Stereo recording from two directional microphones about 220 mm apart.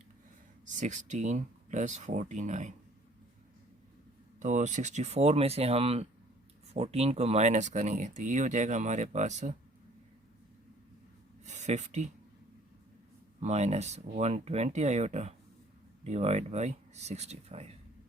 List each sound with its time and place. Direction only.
0.6 s speech: 35° right (ahead or behind)
4.4 s speech: 35° right (ahead or behind)
11.4 s a sound: 30° right (ahead or behind)
13.4 s speech: 30° right (ahead or behind)